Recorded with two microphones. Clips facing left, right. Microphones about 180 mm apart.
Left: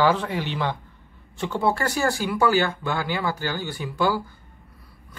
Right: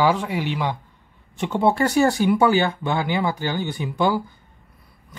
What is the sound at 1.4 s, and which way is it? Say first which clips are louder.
Speech: right 4 dB; 20° right (ahead or behind).